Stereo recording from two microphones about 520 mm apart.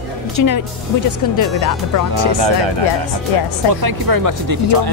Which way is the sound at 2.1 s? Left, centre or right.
Right.